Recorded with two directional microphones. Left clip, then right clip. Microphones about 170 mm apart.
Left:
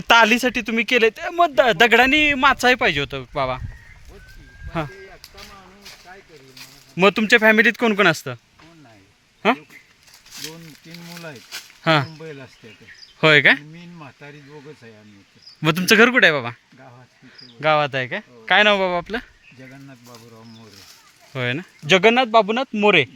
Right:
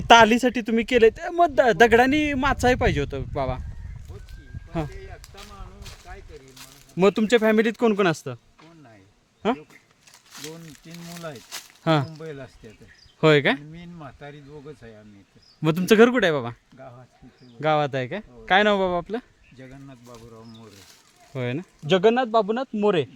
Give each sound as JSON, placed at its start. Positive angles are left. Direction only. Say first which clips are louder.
{"t": 0.1, "sound": "speech", "louder": "even", "side_deg": -25}
{"t": 4.7, "sound": "speech", "louder": "left 4 dB", "side_deg": -5}
{"t": 5.4, "sound": "a sound", "louder": "left 3 dB", "side_deg": 15}
{"t": 6.9, "sound": "speech", "louder": "left 4 dB", "side_deg": -5}
{"t": 11.1, "sound": "speech", "louder": "left 1 dB", "side_deg": -15}
{"t": 19.7, "sound": "speech", "louder": "left 2 dB", "side_deg": 35}
{"t": 21.3, "sound": "speech", "louder": "left 5 dB", "side_deg": -5}
{"t": 21.8, "sound": "speech", "louder": "left 4 dB", "side_deg": 5}